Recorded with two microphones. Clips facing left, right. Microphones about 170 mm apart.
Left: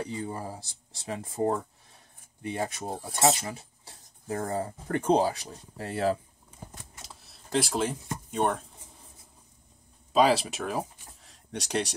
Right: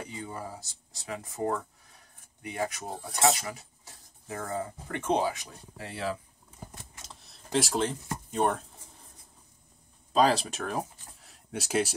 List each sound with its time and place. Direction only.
0.2 s speech: 30° left (ahead or behind)
7.1 s speech: centre (ahead or behind)
10.1 s speech: 5° left (ahead or behind)